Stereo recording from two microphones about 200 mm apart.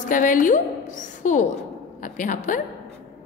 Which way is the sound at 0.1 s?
40° left (ahead or behind).